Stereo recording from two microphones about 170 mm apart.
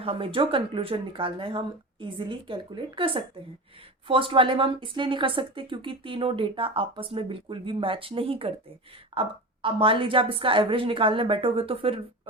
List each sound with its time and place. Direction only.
0.0 s a woman's voice: 30° right (ahead or behind)